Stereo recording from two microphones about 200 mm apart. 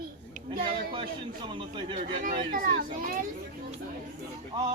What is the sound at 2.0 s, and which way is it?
A child's voice, 35° right (ahead or behind).